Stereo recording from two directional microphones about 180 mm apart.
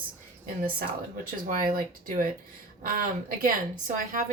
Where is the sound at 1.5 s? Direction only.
50° right (ahead or behind).